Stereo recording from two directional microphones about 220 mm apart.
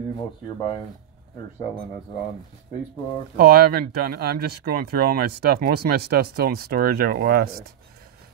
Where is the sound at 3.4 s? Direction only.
45° right (ahead or behind).